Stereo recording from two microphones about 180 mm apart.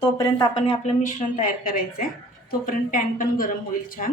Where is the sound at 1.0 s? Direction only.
45° left (ahead or behind).